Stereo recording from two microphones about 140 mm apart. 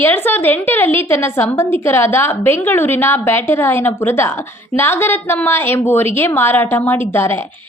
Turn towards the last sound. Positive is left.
turn(degrees=15)  # may be behind; listen again after turning